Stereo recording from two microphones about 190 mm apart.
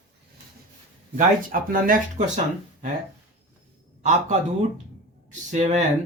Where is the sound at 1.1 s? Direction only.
45° right (ahead or behind).